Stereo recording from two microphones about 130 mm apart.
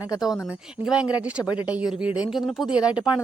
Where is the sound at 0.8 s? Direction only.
10° right (ahead or behind).